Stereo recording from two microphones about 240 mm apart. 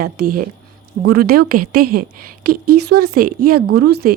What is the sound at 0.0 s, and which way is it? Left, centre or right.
Speech, right.